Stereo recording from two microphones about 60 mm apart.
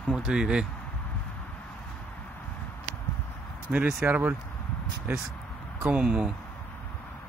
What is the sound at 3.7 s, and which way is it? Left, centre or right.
Speech, centre.